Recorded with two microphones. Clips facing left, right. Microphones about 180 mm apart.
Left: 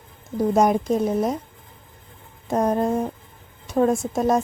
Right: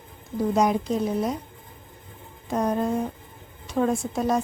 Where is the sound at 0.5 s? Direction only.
50° left (ahead or behind).